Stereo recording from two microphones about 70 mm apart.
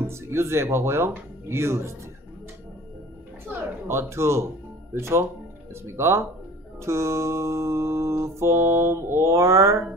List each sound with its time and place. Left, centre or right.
0.0 s speech: right
3.4 s speech: right
6.8 s music: right